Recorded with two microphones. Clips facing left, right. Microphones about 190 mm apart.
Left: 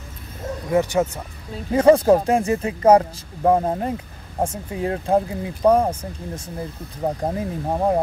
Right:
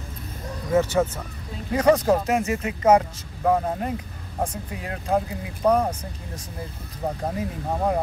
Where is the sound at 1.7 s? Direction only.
30° left (ahead or behind).